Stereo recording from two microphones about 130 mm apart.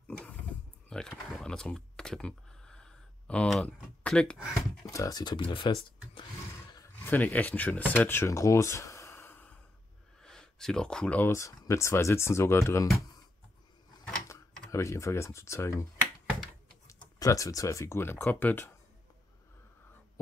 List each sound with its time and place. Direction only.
0.8 s speech: 5° left (ahead or behind)
4.8 s speech: 25° left (ahead or behind); by 6.2 s 40° left (ahead or behind)
7.1 s speech: 10° left (ahead or behind)
10.2 s speech: 5° left (ahead or behind); by 12.8 s 20° left (ahead or behind)
14.7 s speech: 25° left (ahead or behind)
17.2 s speech: 25° left (ahead or behind)